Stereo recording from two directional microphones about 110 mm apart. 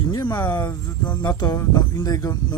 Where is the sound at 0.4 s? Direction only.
15° left (ahead or behind).